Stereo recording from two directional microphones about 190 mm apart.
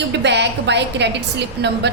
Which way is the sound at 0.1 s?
65° right (ahead or behind).